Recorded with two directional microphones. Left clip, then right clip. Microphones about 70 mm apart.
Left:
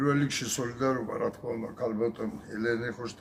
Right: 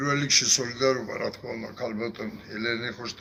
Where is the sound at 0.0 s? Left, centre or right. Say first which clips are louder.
Right 5 dB; left.